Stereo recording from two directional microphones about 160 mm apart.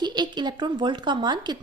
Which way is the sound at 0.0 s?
25° right (ahead or behind).